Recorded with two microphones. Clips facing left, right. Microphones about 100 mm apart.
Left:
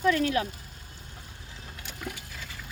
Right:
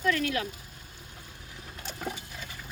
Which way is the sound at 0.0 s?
30° left (ahead or behind).